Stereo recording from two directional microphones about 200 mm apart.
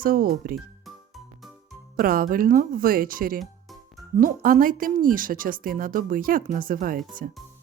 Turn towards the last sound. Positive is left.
turn(degrees=-45)  # may be behind; listen again after turning